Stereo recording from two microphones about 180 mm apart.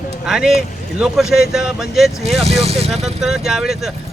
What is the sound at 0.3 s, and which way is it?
Speech, 5° right (ahead or behind).